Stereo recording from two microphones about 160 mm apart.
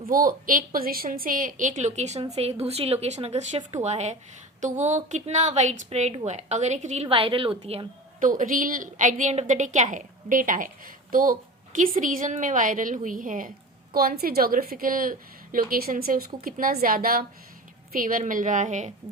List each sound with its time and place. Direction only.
0.0 s a woman's voice: 60° right (ahead or behind); by 7.9 s 35° right (ahead or behind)
8.2 s a woman's voice: 55° right (ahead or behind)
13.9 s a woman's voice: 70° right (ahead or behind); by 18.9 s 50° right (ahead or behind)